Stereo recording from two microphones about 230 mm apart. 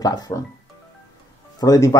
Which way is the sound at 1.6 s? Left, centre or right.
Centre.